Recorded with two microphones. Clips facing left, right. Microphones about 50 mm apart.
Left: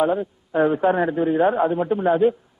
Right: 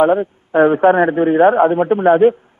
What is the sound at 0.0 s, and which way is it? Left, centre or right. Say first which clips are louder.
A man's voice: right 7 dB; right.